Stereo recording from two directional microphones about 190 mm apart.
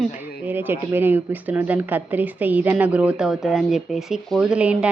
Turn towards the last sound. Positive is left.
turn(degrees=-5)  # may be behind; listen again after turning